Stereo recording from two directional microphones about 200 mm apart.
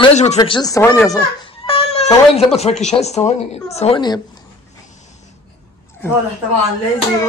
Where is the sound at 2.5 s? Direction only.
30° left (ahead or behind).